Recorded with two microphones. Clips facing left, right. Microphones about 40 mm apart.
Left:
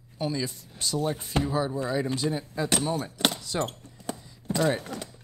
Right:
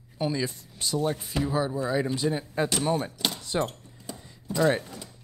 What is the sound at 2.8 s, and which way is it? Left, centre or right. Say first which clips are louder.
Speech: right 3 dB; right.